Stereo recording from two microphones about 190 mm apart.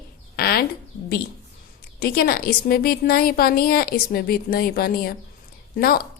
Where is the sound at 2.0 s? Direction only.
50° left (ahead or behind).